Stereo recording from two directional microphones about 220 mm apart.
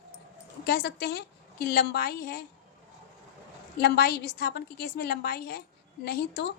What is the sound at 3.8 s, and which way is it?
A woman's voice, 50° left (ahead or behind).